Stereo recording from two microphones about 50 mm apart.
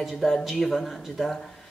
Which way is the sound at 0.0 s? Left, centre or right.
Centre.